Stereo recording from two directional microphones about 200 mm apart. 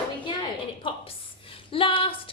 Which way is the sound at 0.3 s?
25° left (ahead or behind).